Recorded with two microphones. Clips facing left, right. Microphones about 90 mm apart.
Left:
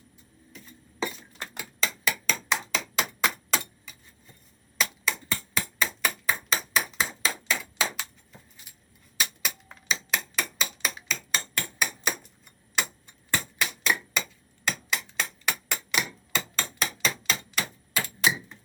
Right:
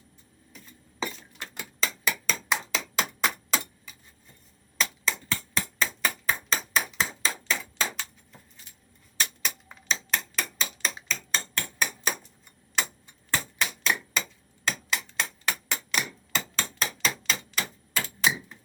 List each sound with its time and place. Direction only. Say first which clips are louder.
0.5 s a sound: left 2 dB; centre (ahead or behind)
1.5 s hammer: even; centre (ahead or behind)
4.8 s a sound: even; 5° left (ahead or behind)
7.3 s hammer: left 1 dB; 5° left (ahead or behind)
7.9 s keys jangling: even; 5° left (ahead or behind)
9.1 s mechanisms: even; 5° left (ahead or behind)
11.1 s hammer: even; 5° left (ahead or behind)
13.3 s hammer: even; centre (ahead or behind)
15.2 s hammer: even; 10° left (ahead or behind)